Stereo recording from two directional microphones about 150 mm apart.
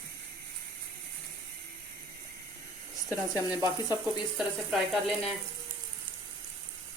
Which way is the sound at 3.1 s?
15° right (ahead or behind).